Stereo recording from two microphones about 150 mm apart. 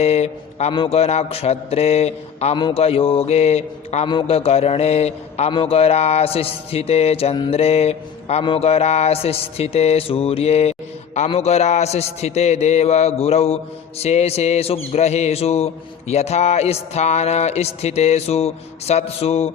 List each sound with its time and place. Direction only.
0.0 s mantra: 45° left (ahead or behind)
2.6 s mantra: 30° left (ahead or behind)